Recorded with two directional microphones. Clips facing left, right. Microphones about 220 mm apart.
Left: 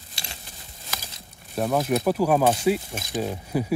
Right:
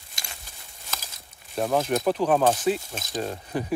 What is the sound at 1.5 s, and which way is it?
Speech, centre (ahead or behind).